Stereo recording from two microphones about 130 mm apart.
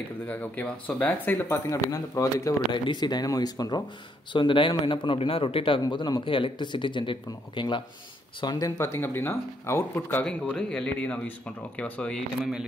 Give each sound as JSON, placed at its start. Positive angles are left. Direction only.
{"t": 0.3, "sound": "speech", "side_deg": 15}
{"t": 2.7, "sound": "speech", "side_deg": 35}
{"t": 10.2, "sound": "speech", "side_deg": 5}